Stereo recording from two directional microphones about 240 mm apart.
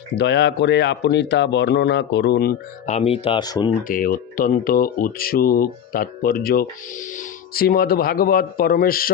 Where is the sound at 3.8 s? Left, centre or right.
Left.